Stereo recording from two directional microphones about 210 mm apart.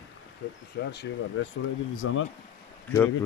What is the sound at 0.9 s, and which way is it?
Speech, 60° left (ahead or behind).